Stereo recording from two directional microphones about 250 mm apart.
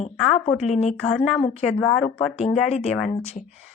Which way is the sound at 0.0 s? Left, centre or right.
Left.